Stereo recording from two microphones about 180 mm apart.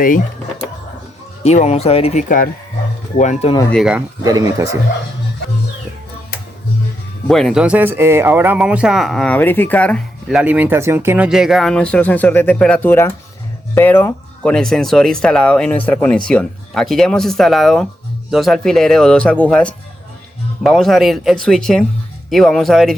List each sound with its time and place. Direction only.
1.5 s speech: 35° left (ahead or behind)
3.7 s speech: centre (ahead or behind)
4.2 s speech: 20° right (ahead or behind)
7.3 s speech: centre (ahead or behind)